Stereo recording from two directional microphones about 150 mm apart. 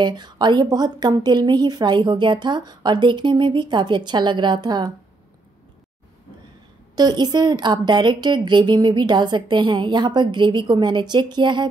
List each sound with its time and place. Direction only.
0.0 s a woman's voice: 30° right (ahead or behind)
7.0 s a woman's voice: 25° right (ahead or behind)